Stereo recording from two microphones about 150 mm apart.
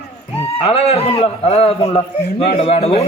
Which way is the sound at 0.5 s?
40° left (ahead or behind).